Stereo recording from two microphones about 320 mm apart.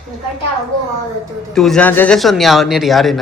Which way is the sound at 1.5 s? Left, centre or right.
Centre.